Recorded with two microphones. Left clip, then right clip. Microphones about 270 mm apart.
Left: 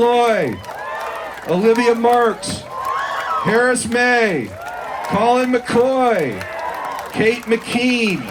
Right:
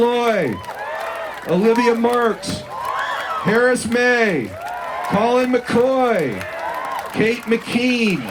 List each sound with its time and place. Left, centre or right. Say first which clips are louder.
0.0 s a sound: left 3 dB; left
1.5 s a man's voice: left 1 dB; left
3.4 s a man's voice: even; left